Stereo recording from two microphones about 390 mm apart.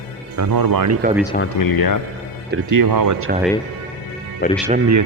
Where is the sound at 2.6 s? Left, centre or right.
Right.